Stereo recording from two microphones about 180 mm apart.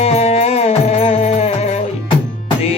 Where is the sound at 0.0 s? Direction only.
35° left (ahead or behind).